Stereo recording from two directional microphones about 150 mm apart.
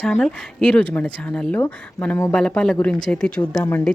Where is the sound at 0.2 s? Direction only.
5° left (ahead or behind).